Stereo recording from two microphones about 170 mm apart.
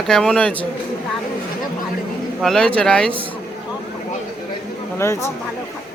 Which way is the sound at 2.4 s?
5° left (ahead or behind).